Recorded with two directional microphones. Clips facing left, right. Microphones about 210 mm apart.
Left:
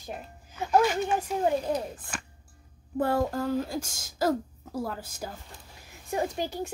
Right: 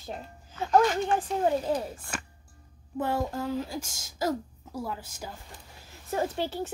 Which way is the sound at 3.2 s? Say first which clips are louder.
Left 3 dB; 55° left (ahead or behind).